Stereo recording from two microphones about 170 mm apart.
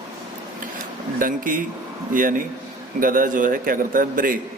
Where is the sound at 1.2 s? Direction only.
55° right (ahead or behind).